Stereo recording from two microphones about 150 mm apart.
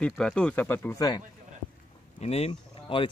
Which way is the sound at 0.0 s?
5° left (ahead or behind).